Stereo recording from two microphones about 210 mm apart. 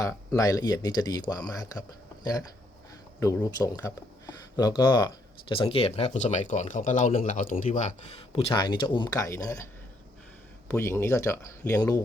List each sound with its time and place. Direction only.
0.0 s speech: 15° left (ahead or behind)
3.2 s speech: 15° left (ahead or behind)
10.7 s speech: 10° left (ahead or behind)